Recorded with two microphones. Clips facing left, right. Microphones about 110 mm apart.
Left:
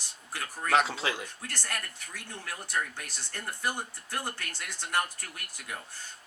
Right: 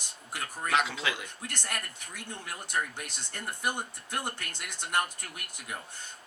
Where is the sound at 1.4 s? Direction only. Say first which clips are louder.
Right 1 dB; 15° right (ahead or behind).